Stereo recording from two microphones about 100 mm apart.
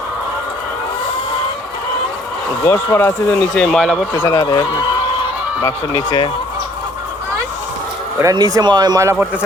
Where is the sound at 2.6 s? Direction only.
35° left (ahead or behind).